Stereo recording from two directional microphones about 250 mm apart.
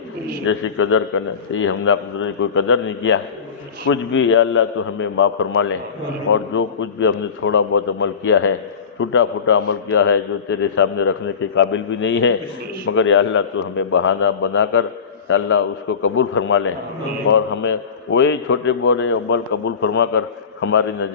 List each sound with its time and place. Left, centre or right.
0.4 s a man's voice: left